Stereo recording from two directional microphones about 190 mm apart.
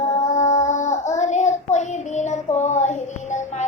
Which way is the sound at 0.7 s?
40° left (ahead or behind).